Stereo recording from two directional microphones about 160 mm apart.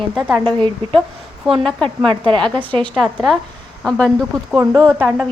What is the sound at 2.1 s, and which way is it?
Speech, 30° right (ahead or behind).